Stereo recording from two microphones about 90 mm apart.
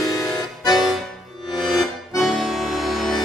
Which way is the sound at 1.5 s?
Centre (ahead or behind).